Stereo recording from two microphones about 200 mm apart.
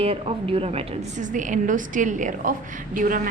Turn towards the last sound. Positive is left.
turn(degrees=-45)  # may be behind; listen again after turning